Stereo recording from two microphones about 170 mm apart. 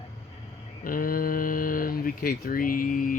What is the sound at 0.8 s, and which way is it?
Speech, 55° left (ahead or behind).